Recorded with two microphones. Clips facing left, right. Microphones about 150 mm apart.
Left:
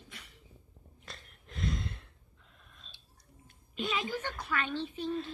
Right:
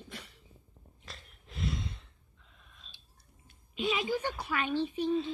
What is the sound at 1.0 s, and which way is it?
Breathing, centre (ahead or behind).